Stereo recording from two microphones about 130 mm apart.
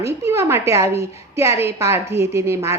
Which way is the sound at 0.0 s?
20° right (ahead or behind).